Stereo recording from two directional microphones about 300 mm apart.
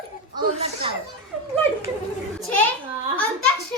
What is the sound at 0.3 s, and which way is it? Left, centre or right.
Speech, centre.